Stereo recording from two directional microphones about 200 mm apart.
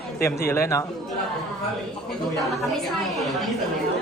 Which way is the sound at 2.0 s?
Centre (ahead or behind).